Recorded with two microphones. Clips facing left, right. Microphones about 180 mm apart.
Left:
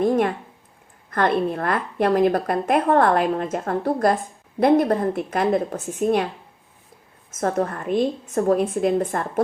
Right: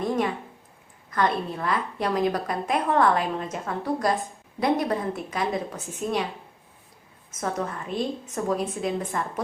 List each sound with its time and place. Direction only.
0.0 s a woman's voice: 55° left (ahead or behind)
7.3 s a woman's voice: 50° left (ahead or behind)